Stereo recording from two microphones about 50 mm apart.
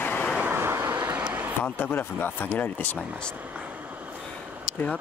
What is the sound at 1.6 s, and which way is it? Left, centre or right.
Speech, left.